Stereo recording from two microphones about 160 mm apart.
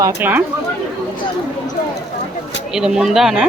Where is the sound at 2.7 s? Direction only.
5° right (ahead or behind).